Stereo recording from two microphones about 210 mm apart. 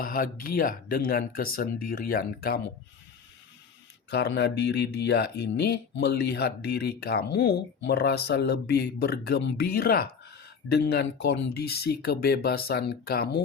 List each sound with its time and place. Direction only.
0.0 s speech: 40° left (ahead or behind)
4.1 s speech: 55° left (ahead or behind)